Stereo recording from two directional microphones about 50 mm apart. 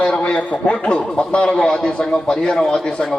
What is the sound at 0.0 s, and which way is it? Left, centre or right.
A man's voice, centre.